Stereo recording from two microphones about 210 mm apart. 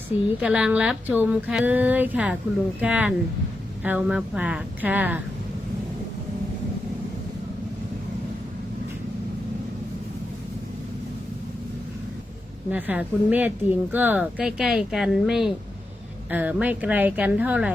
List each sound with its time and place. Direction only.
0.1 s a woman's voice: 30° left (ahead or behind)
0.4 s speech: 5° right (ahead or behind)
12.7 s speech: 10° right (ahead or behind)